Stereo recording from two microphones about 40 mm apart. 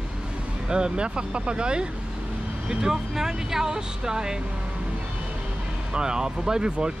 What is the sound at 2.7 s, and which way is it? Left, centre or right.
Speech, centre.